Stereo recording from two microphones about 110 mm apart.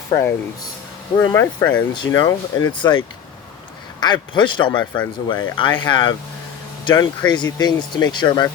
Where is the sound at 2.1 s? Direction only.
35° left (ahead or behind).